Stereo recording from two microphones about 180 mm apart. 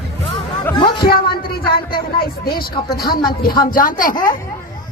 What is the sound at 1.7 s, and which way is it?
A woman's voice, 60° left (ahead or behind).